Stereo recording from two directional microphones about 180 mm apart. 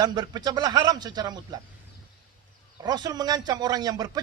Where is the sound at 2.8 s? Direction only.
20° right (ahead or behind).